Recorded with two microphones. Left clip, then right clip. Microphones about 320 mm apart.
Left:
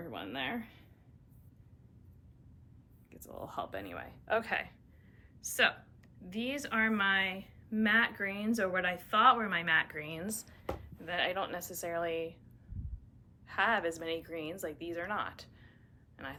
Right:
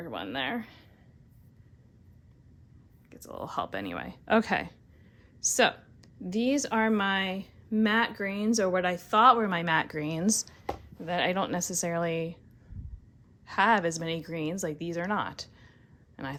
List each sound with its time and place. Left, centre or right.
0.1 s speech: right
3.1 s a woman's voice: right
13.5 s a woman's voice: centre